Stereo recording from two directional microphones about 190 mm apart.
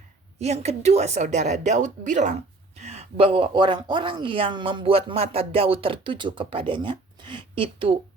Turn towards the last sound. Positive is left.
turn(degrees=-25)  # may be behind; listen again after turning